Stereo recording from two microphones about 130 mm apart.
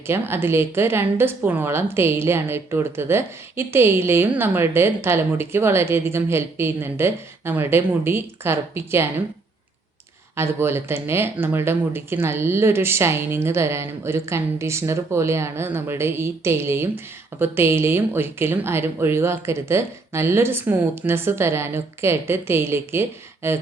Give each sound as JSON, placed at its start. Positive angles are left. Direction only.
{"t": 0.1, "sound": "speech", "side_deg": -20}
{"t": 10.3, "sound": "speech", "side_deg": -20}